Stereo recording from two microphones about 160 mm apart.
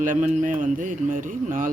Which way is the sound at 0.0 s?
50° right (ahead or behind).